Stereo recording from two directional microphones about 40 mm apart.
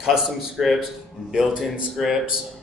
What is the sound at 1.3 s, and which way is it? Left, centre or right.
Speech, centre.